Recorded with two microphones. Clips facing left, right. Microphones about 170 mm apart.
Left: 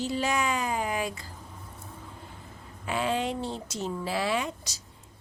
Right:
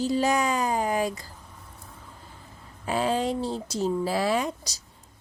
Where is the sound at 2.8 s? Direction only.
35° right (ahead or behind).